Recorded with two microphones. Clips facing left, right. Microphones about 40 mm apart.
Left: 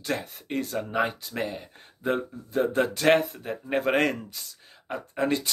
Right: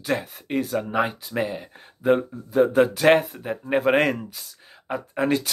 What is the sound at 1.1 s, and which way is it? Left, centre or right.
Speech, right.